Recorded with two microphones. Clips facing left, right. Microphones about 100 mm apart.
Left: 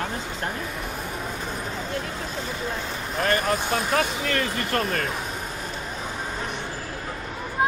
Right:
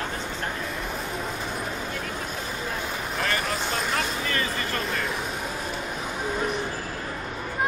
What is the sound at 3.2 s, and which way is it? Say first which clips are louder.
Speech: left 6 dB; 50° left (ahead or behind).